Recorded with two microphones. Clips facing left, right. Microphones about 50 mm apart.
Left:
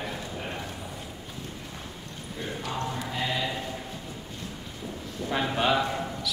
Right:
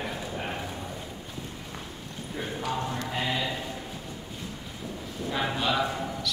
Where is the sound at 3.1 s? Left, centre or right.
Centre.